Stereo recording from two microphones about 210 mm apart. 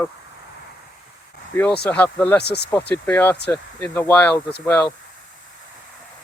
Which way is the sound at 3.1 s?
10° left (ahead or behind).